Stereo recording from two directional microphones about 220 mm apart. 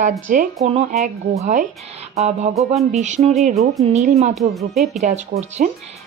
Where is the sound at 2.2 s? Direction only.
30° right (ahead or behind).